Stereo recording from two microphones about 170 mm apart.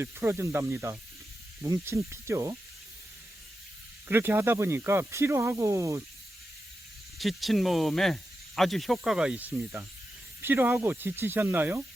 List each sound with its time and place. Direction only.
0.0 s speech: 15° right (ahead or behind)
4.1 s speech: 15° right (ahead or behind)
7.2 s speech: centre (ahead or behind)